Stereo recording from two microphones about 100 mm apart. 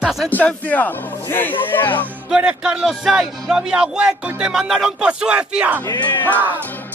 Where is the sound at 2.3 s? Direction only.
10° right (ahead or behind).